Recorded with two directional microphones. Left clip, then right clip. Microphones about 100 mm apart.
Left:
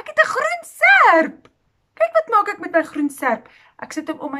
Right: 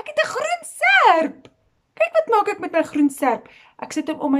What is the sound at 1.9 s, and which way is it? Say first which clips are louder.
Speech: left 1 dB; 25° right (ahead or behind).